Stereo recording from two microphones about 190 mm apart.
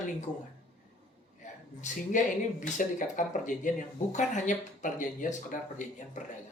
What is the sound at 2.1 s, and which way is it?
Speech, 40° left (ahead or behind).